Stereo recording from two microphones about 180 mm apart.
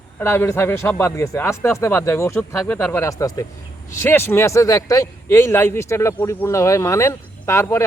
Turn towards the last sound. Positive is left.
turn(degrees=15)  # may be behind; listen again after turning